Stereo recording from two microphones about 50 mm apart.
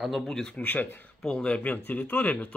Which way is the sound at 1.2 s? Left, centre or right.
Left.